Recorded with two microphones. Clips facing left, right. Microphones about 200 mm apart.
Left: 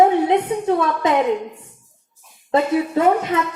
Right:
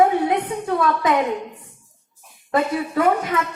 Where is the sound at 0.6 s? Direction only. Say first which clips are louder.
Left 2 dB; 25° left (ahead or behind).